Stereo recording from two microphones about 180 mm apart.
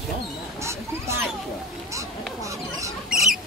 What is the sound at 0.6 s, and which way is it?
Speech, 15° right (ahead or behind).